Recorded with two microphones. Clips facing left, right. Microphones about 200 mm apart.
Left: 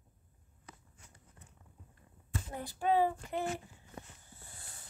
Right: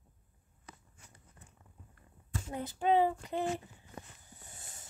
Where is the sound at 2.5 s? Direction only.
20° right (ahead or behind).